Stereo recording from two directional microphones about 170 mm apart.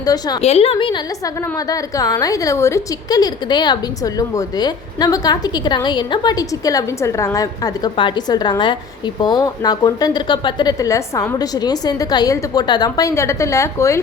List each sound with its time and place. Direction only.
0.0 s a woman's voice: 20° left (ahead or behind)
0.4 s a woman's voice: 35° left (ahead or behind); by 14.0 s 15° left (ahead or behind)